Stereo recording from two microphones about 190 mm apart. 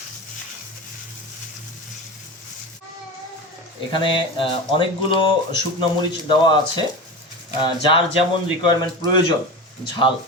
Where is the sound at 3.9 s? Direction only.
25° left (ahead or behind).